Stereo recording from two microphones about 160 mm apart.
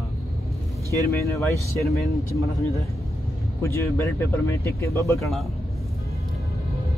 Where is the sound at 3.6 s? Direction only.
15° left (ahead or behind).